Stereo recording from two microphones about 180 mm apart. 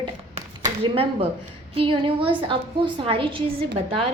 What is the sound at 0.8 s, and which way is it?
A woman's voice, 30° right (ahead or behind).